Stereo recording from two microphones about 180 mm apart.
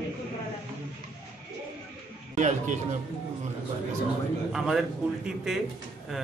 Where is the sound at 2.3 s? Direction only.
45° right (ahead or behind).